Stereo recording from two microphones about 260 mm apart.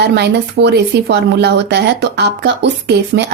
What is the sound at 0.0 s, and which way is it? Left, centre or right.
Speech, right.